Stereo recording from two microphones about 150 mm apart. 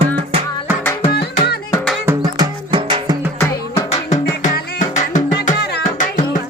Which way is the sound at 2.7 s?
35° right (ahead or behind).